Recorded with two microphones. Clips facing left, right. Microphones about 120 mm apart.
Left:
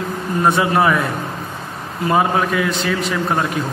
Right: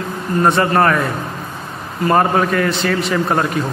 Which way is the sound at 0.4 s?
5° left (ahead or behind).